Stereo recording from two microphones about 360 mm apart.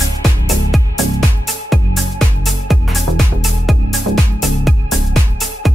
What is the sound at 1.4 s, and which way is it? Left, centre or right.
Music, centre.